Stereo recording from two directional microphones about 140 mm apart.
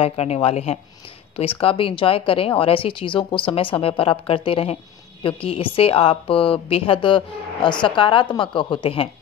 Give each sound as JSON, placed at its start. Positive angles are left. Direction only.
{"t": 0.0, "sound": "a woman's voice", "side_deg": 45}